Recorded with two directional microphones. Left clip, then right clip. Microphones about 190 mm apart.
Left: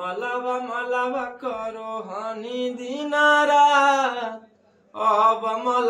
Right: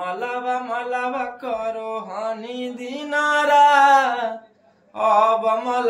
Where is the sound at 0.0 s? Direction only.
10° right (ahead or behind).